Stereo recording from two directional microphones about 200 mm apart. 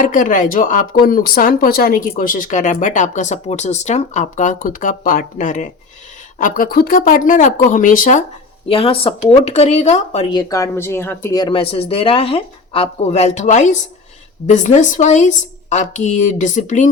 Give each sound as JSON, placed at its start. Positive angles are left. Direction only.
{"t": 0.0, "sound": "a woman's voice", "side_deg": 40}
{"t": 8.6, "sound": "a woman's voice", "side_deg": 30}
{"t": 10.3, "sound": "a woman's voice", "side_deg": 15}